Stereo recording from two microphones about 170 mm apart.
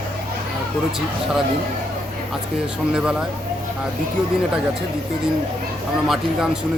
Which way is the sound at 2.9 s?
5° right (ahead or behind).